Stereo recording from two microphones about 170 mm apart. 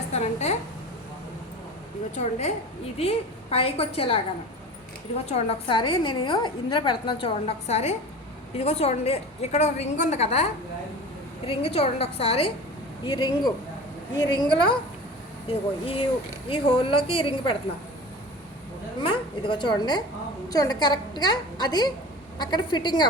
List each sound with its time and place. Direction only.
0.1 s a woman's voice: 40° left (ahead or behind)
3.0 s a woman's voice: 35° left (ahead or behind)
5.2 s a woman's voice: 35° left (ahead or behind)
18.9 s a woman's voice: 30° left (ahead or behind)